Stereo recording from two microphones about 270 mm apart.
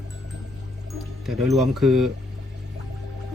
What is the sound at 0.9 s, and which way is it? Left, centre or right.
Speech, centre.